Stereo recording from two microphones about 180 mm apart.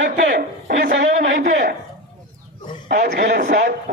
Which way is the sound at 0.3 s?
50° right (ahead or behind).